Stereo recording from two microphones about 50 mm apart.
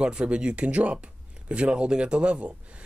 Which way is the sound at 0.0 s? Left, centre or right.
Centre.